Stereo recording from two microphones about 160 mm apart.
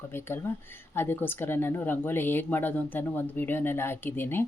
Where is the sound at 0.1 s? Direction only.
15° left (ahead or behind).